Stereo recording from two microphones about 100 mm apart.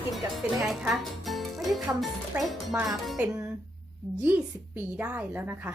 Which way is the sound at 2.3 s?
15° right (ahead or behind).